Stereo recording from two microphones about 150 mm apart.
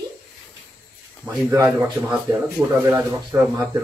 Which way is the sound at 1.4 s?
15° right (ahead or behind).